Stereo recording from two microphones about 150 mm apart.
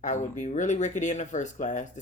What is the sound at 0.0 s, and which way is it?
Speech, 55° left (ahead or behind).